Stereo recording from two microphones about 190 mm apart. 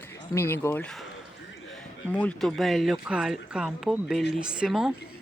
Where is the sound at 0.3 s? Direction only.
10° left (ahead or behind); by 4.9 s 5° right (ahead or behind).